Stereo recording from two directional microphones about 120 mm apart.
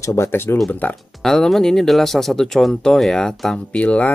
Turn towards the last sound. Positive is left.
turn(degrees=10)  # may be behind; listen again after turning